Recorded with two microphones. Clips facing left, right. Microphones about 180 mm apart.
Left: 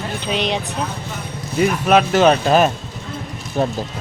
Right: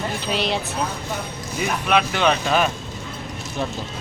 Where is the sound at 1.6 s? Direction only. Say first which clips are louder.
Left 6 dB; 45° left (ahead or behind).